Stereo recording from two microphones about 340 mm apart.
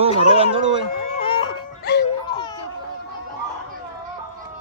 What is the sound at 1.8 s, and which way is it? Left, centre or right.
Music, left.